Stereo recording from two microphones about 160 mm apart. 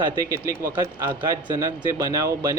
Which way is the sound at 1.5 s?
20° right (ahead or behind).